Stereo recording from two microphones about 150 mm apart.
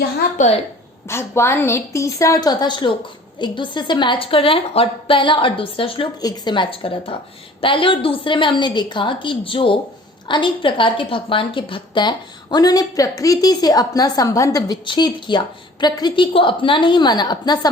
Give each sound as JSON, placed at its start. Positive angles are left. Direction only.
{"t": 0.3, "sound": "a woman's voice", "side_deg": 50}
{"t": 1.0, "sound": "a woman's voice", "side_deg": 15}